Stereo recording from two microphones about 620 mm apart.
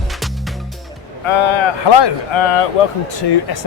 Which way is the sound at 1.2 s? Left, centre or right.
Left.